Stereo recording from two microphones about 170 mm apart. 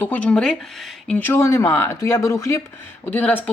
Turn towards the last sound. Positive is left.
turn(degrees=10)  # may be behind; listen again after turning